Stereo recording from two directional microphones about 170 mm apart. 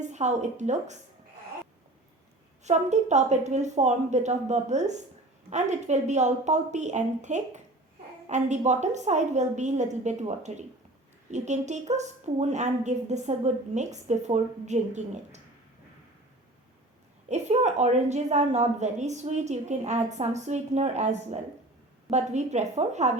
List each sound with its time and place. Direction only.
0.0 s a woman's voice: 45° right (ahead or behind)
2.6 s a woman's voice: 40° right (ahead or behind)
17.2 s a woman's voice: 40° right (ahead or behind)